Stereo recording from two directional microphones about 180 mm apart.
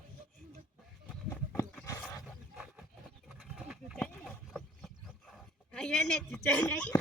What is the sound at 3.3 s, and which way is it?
Wild animals, 5° right (ahead or behind).